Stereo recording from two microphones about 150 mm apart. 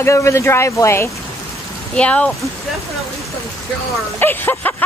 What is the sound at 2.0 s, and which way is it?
Speech, 10° left (ahead or behind).